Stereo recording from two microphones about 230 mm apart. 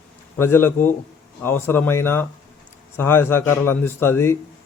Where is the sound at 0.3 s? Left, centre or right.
Centre.